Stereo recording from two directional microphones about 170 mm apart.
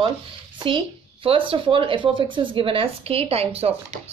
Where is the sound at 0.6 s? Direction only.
30° right (ahead or behind).